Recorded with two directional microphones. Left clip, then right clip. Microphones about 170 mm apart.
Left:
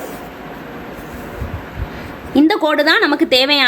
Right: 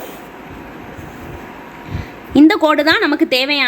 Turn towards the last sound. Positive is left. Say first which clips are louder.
# left 2 dB
turn(degrees=-5)  # may be behind; listen again after turning